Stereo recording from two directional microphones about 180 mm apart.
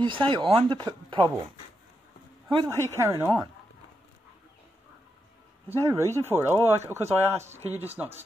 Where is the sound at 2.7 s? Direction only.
15° left (ahead or behind).